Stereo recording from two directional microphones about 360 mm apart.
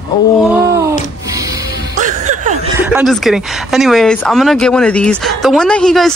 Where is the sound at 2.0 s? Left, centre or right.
Centre.